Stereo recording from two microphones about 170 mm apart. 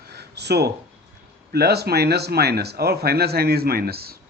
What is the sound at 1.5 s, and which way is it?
Speech, 70° right (ahead or behind).